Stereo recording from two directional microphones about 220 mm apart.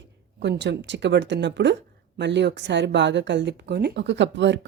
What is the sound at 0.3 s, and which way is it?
Speech, 50° right (ahead or behind).